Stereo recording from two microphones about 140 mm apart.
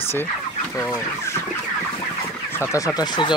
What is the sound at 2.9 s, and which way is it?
Speech, 35° left (ahead or behind).